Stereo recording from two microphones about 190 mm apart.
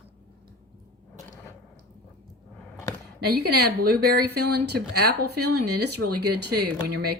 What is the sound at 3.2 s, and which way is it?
A woman's voice, 55° right (ahead or behind).